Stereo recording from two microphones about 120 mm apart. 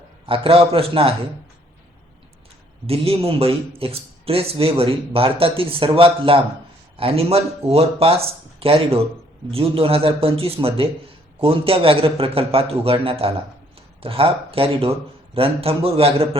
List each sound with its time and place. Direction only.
0.3 s speech: 50° right (ahead or behind)
2.8 s speech: 55° right (ahead or behind)